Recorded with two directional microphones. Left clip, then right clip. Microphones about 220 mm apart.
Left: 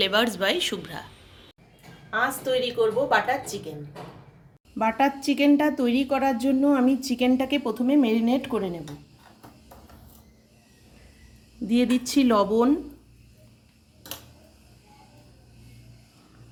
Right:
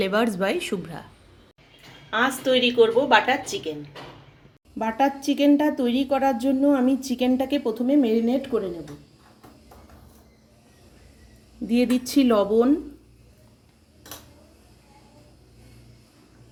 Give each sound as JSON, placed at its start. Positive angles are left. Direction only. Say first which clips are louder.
{"t": 0.0, "sound": "speech", "louder": "even", "side_deg": -35}
{"t": 2.0, "sound": "a woman's voice", "louder": "right 3 dB", "side_deg": -15}
{"t": 4.8, "sound": "a woman's voice", "louder": "even", "side_deg": 15}
{"t": 11.6, "sound": "a woman's voice", "louder": "right 1 dB", "side_deg": 5}